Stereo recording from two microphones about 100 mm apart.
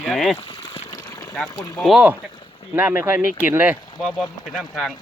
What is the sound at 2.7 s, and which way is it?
Speech, 20° right (ahead or behind).